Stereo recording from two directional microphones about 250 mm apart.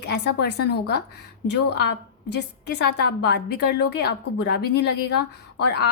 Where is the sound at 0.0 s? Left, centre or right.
Left.